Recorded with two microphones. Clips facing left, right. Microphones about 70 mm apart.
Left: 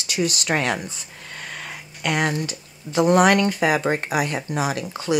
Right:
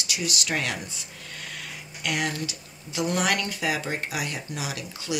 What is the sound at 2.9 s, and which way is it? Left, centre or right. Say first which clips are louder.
Speech: left 10 dB; left.